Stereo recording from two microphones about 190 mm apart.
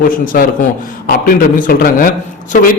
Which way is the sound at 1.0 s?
50° left (ahead or behind).